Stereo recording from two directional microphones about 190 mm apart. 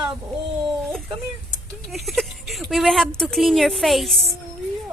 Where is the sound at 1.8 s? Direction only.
Centre (ahead or behind).